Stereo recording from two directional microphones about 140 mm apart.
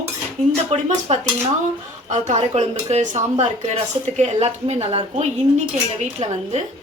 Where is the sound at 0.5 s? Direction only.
50° right (ahead or behind).